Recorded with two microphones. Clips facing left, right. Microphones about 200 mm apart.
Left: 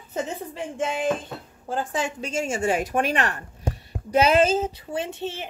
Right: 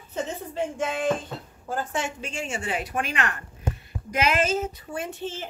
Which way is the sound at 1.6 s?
30° left (ahead or behind).